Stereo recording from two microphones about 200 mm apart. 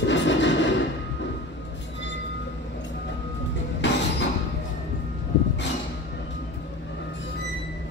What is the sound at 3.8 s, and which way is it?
Music, 65° left (ahead or behind).